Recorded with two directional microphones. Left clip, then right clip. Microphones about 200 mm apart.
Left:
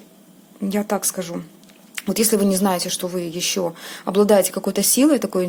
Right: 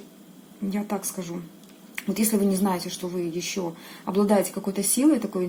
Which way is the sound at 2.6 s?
45° left (ahead or behind).